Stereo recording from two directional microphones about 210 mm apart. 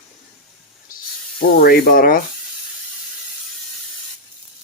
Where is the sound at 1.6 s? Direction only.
45° left (ahead or behind).